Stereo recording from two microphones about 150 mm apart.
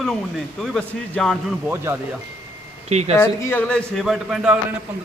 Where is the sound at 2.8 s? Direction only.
45° right (ahead or behind).